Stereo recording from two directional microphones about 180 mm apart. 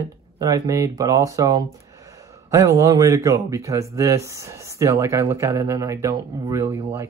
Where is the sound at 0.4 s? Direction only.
20° right (ahead or behind).